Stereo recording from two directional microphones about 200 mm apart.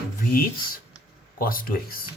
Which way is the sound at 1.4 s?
45° left (ahead or behind).